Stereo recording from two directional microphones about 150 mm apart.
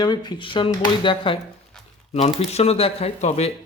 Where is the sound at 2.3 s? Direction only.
45° left (ahead or behind).